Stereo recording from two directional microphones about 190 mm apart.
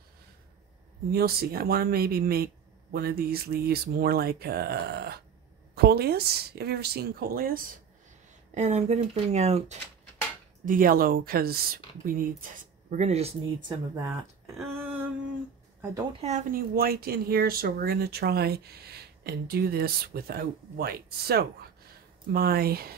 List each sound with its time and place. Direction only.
1.1 s speech: 55° right (ahead or behind)
8.5 s speech: 35° right (ahead or behind)
10.6 s speech: 45° right (ahead or behind)
13.7 s speech: 15° right (ahead or behind)
14.7 s a sound: 10° right (ahead or behind)
15.9 s speech: 30° right (ahead or behind); by 22.9 s 55° right (ahead or behind)